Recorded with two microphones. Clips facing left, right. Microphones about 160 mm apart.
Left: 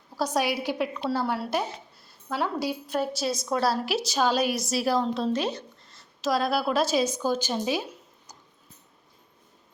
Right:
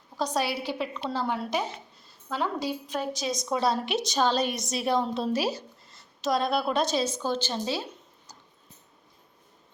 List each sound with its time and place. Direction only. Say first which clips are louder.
0.2 s a woman's voice: left 2 dB; 10° left (ahead or behind)